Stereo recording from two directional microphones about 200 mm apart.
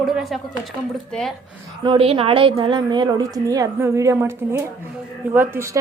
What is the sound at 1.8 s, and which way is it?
A woman's voice, 25° right (ahead or behind).